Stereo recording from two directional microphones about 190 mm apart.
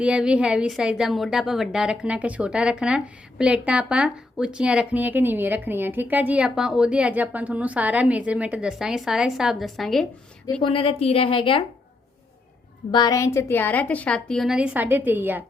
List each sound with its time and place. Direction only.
0.0 s a woman's voice: 5° right (ahead or behind)
10.6 s speech: 30° left (ahead or behind)
12.9 s a woman's voice: 20° left (ahead or behind); by 15.4 s 10° right (ahead or behind)